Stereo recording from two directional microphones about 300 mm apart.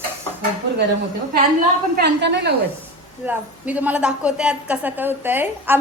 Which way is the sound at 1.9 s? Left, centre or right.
Right.